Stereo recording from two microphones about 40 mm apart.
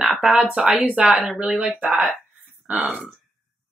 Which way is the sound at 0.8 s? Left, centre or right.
Right.